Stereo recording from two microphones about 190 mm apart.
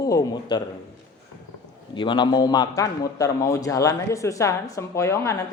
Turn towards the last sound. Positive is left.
turn(degrees=15)  # may be behind; listen again after turning